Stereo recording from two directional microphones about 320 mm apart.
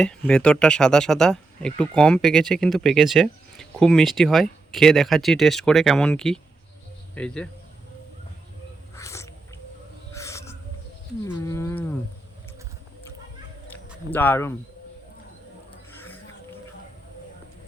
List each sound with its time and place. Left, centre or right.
0.0 s speech: centre
9.0 s crow: centre
10.1 s owl: centre
11.3 s cattle: centre
14.1 s cattle: centre